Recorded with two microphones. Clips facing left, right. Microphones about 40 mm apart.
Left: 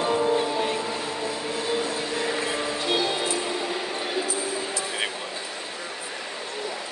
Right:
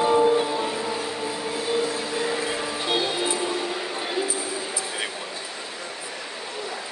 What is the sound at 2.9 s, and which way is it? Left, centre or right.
Music, centre.